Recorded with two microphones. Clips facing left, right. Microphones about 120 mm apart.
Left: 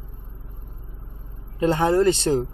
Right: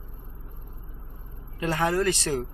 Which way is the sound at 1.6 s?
25° left (ahead or behind).